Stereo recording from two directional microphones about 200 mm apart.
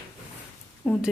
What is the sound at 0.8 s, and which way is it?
Speech, 5° right (ahead or behind).